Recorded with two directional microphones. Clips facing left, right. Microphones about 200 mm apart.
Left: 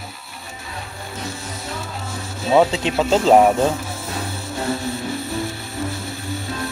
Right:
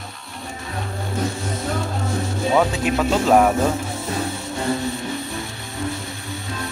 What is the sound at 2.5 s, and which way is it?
Speech, 25° left (ahead or behind).